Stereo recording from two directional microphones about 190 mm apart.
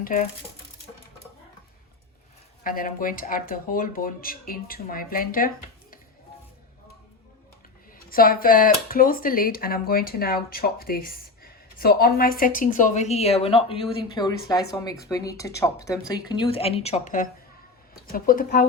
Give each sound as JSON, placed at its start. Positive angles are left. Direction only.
{"t": 0.0, "sound": "speech", "side_deg": 45}
{"t": 2.6, "sound": "speech", "side_deg": 45}
{"t": 7.9, "sound": "speech", "side_deg": 50}